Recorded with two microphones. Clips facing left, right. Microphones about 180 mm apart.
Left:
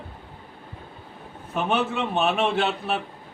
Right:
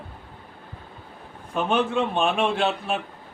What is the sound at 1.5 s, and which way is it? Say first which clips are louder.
A man's voice: right 2 dB; 5° left (ahead or behind).